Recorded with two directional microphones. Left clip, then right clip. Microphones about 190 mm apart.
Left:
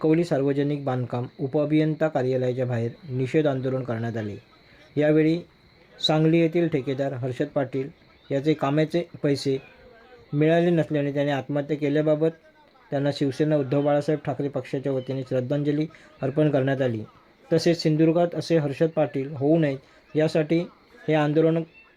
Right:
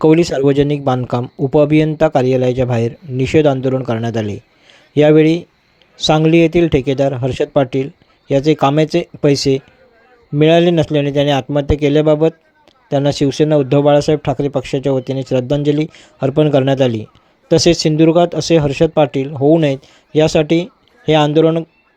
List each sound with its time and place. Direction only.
0.0 s speech: 35° right (ahead or behind)